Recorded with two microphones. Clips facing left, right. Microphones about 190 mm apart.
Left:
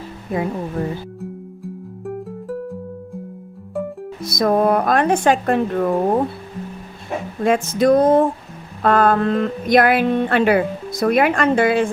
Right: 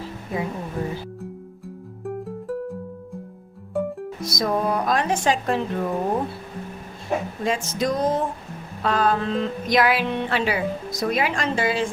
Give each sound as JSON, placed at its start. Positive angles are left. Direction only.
{"t": 1.2, "sound": "music", "side_deg": 0}
{"t": 4.2, "sound": "speech", "side_deg": 60}
{"t": 7.4, "sound": "speech", "side_deg": 55}